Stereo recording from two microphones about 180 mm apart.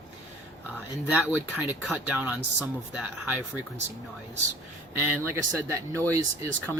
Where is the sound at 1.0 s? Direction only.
5° right (ahead or behind).